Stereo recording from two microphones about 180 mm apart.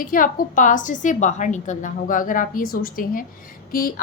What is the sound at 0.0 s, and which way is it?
A woman's voice, 50° left (ahead or behind).